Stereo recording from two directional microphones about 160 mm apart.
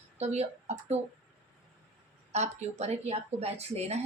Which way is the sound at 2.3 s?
45° right (ahead or behind).